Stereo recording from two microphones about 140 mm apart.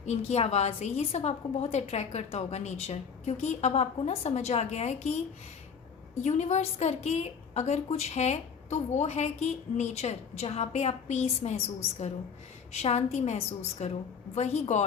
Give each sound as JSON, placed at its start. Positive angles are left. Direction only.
{"t": 0.0, "sound": "a woman's voice", "side_deg": 50}
{"t": 6.2, "sound": "a woman's voice", "side_deg": 55}